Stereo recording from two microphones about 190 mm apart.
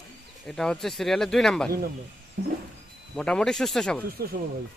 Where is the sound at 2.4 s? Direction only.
65° right (ahead or behind).